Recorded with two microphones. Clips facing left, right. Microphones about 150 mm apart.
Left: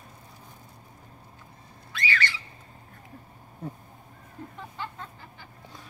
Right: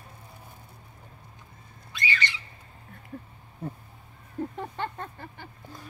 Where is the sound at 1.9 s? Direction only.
20° right (ahead or behind).